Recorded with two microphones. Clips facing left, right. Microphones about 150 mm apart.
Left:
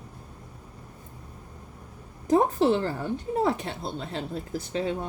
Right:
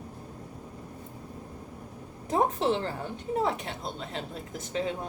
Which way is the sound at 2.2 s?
40° left (ahead or behind).